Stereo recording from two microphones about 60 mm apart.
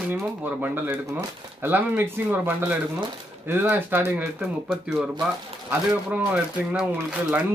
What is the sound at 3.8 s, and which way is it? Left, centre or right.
Speech, right.